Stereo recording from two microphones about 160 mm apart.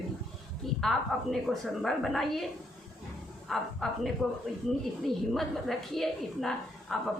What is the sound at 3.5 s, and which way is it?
A woman's voice, centre (ahead or behind).